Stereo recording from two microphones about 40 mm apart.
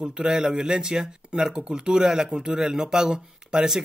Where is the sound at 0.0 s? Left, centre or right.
Centre.